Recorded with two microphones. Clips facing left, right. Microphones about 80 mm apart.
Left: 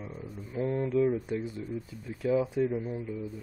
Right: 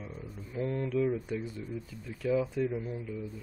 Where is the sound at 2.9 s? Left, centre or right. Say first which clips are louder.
Left 3 dB; centre.